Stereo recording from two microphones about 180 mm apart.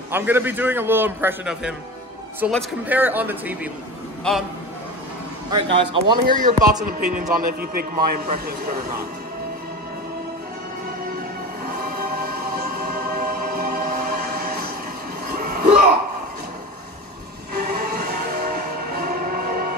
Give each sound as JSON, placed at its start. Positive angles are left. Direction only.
{"t": 0.1, "sound": "a man's voice", "side_deg": -10}
{"t": 4.3, "sound": "a man's voice", "side_deg": 5}
{"t": 5.5, "sound": "speech", "side_deg": -25}
{"t": 6.2, "sound": "a man's voice", "side_deg": -45}
{"t": 13.1, "sound": "train", "side_deg": -55}
{"t": 15.2, "sound": "music", "side_deg": -55}
{"t": 17.6, "sound": "music", "side_deg": -60}